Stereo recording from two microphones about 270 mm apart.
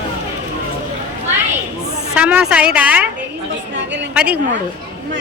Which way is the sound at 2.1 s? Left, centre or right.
Centre.